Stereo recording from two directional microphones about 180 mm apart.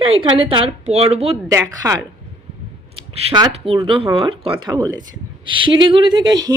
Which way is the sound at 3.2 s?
30° right (ahead or behind).